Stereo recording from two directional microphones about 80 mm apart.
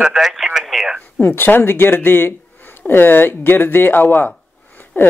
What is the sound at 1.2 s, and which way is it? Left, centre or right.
Speech, left.